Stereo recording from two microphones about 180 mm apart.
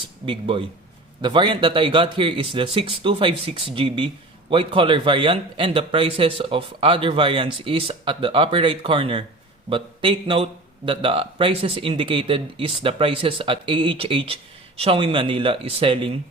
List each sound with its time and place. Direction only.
0.3 s speech: 30° right (ahead or behind)